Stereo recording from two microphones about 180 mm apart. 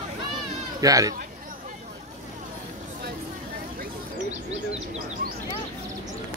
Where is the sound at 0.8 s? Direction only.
20° right (ahead or behind).